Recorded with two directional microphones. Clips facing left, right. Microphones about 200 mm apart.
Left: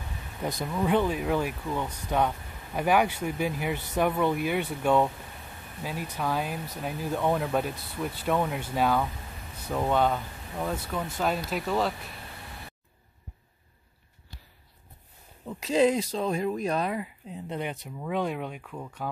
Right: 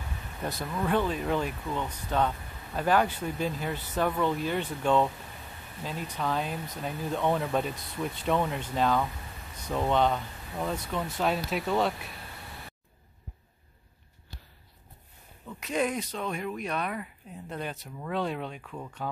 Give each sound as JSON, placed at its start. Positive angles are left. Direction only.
{"t": 0.4, "sound": "speech", "side_deg": 10}
{"t": 15.4, "sound": "a sound", "side_deg": 25}
{"t": 16.1, "sound": "speech", "side_deg": 30}
{"t": 16.9, "sound": "speech", "side_deg": 20}